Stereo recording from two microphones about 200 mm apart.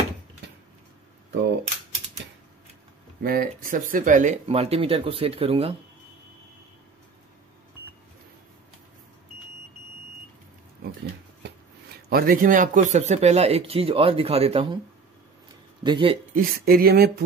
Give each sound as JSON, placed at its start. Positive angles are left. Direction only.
{"t": 3.2, "sound": "speech", "side_deg": -45}
{"t": 12.1, "sound": "speech", "side_deg": -45}
{"t": 15.8, "sound": "speech", "side_deg": -25}
{"t": 16.3, "sound": "speech", "side_deg": -50}